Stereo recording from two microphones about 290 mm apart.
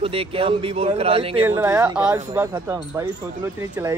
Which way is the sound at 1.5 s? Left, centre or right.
Centre.